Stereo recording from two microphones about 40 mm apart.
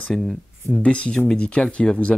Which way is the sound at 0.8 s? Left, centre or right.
Left.